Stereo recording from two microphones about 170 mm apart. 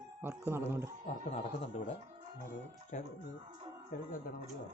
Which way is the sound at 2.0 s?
40° right (ahead or behind).